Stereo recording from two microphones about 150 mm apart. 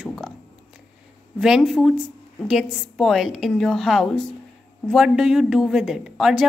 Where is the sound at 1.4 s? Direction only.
Centre (ahead or behind).